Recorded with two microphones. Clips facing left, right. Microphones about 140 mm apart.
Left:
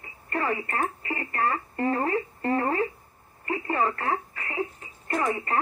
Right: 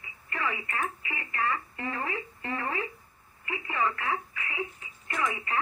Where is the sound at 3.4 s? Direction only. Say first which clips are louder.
Left 4 dB; 45° left (ahead or behind).